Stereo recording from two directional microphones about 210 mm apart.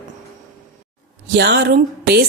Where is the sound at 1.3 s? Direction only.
50° right (ahead or behind).